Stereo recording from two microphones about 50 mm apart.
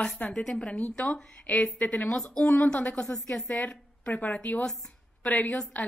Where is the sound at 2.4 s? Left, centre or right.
Left.